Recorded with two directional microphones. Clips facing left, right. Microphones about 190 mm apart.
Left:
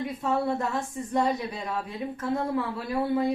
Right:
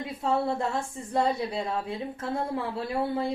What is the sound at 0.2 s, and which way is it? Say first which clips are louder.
A woman's voice: right 1 dB; 30° right (ahead or behind).